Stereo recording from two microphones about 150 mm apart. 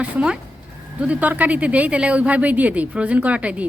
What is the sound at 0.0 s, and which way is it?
A woman's voice, 5° right (ahead or behind).